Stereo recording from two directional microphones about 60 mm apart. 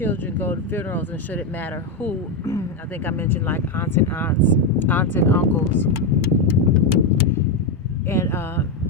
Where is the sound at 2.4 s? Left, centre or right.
Left.